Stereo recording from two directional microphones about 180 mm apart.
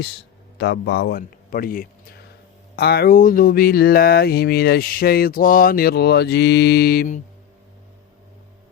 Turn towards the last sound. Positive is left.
turn(degrees=55)  # may be behind; listen again after turning